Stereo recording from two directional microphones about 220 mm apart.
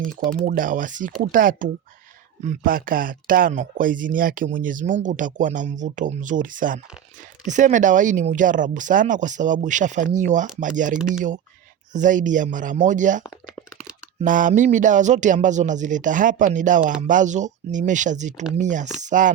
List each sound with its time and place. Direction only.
0.3 s speech: 35° right (ahead or behind)
10.9 s speech: 5° right (ahead or behind)
11.9 s speech: 35° right (ahead or behind)
13.2 s a sound: 5° right (ahead or behind)
14.2 s speech: 35° right (ahead or behind)